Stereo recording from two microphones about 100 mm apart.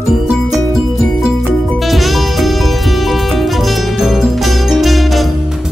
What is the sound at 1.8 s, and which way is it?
Music, centre (ahead or behind).